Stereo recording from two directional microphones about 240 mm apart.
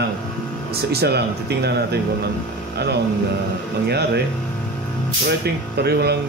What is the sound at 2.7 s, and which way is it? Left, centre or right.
Music, right.